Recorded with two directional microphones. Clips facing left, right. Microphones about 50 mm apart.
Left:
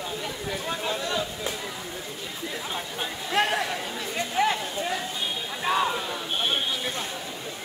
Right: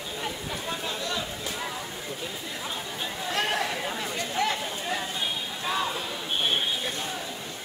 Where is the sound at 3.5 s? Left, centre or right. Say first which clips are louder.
Left 1 dB; centre.